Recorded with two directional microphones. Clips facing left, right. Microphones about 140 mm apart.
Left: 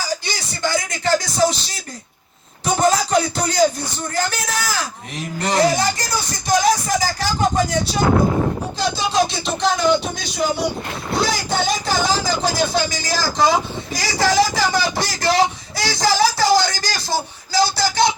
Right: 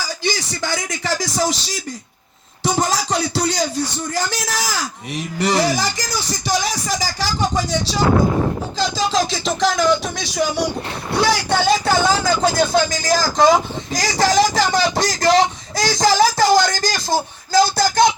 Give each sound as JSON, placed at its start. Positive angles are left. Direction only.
{"t": 0.3, "sound": "music", "side_deg": -90}
{"t": 2.6, "sound": "music", "side_deg": -90}
{"t": 5.4, "sound": "speech", "side_deg": -90}
{"t": 8.8, "sound": "music", "side_deg": -90}
{"t": 11.2, "sound": "speech", "side_deg": -60}